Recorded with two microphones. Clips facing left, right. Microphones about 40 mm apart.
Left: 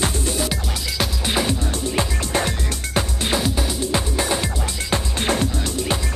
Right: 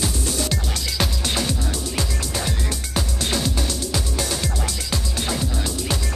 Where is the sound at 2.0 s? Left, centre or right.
Left.